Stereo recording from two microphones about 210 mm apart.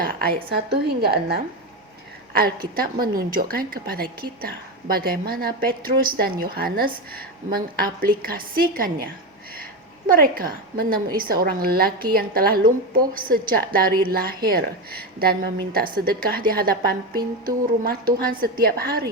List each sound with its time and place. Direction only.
0.0 s a sound: 45° right (ahead or behind)
0.7 s a woman's voice: 50° right (ahead or behind)
2.7 s a woman's voice: 45° right (ahead or behind)
10.1 s a woman's voice: 40° right (ahead or behind)